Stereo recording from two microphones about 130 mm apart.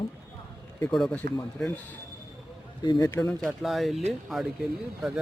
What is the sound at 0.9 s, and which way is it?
Speech, 5° left (ahead or behind).